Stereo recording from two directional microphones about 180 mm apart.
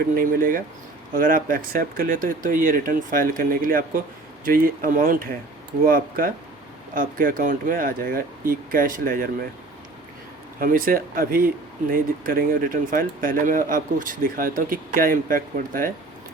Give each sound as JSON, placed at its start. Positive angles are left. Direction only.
{"t": 0.0, "sound": "speech", "side_deg": -50}
{"t": 10.6, "sound": "speech", "side_deg": -50}